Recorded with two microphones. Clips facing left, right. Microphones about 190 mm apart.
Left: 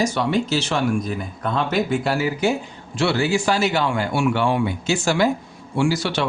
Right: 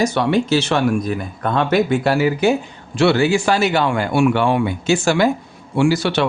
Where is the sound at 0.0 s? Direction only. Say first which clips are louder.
Right 4 dB; 60° right (ahead or behind).